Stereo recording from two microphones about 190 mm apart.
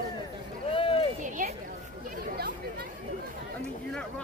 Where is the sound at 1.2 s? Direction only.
45° right (ahead or behind).